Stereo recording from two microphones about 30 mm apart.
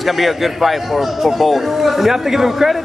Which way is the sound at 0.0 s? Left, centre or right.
Centre.